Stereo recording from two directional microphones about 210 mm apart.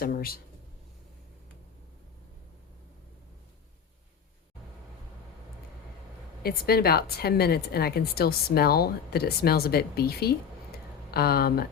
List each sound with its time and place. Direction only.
0.0 s a woman's voice: 45° left (ahead or behind)
6.4 s a woman's voice: 45° left (ahead or behind)